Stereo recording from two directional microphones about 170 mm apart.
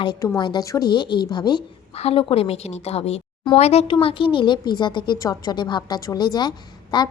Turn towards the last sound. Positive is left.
turn(degrees=25)  # may be behind; listen again after turning